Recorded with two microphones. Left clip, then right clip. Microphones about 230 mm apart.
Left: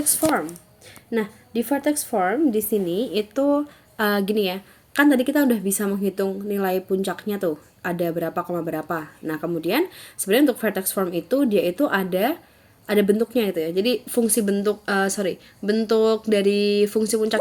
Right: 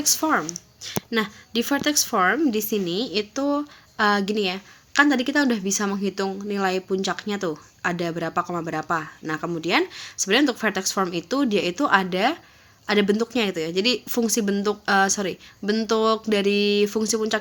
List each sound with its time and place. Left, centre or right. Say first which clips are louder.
0.0 s speech: even; right